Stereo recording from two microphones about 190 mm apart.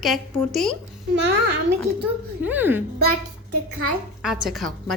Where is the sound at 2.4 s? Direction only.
10° right (ahead or behind).